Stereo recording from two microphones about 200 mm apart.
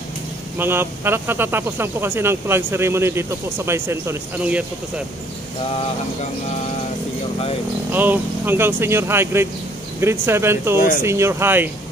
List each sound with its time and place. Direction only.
0.6 s speech: 10° right (ahead or behind)
7.9 s speech: 10° right (ahead or behind)